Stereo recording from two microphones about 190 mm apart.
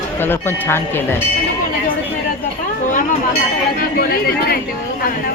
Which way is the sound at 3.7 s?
50° left (ahead or behind).